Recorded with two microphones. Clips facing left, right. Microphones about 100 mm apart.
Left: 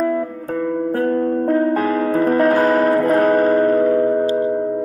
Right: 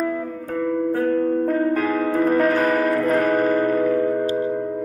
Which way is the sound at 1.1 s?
35° left (ahead or behind).